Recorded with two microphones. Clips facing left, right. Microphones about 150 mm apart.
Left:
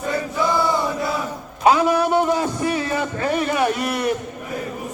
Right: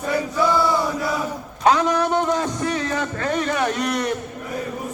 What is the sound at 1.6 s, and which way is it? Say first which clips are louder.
A man's voice: left 2 dB; 5° left (ahead or behind).